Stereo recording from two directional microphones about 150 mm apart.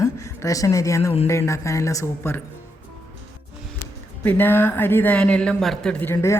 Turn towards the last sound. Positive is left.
turn(degrees=15)  # may be behind; listen again after turning